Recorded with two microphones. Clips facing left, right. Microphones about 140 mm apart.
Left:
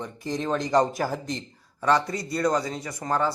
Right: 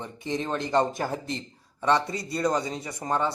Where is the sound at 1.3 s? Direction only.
25° right (ahead or behind).